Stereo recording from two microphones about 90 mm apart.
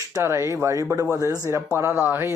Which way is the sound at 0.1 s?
30° right (ahead or behind).